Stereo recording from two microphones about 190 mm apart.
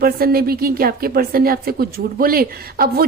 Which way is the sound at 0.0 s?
50° right (ahead or behind).